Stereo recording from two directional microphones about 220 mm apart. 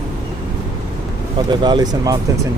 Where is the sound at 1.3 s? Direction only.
20° right (ahead or behind).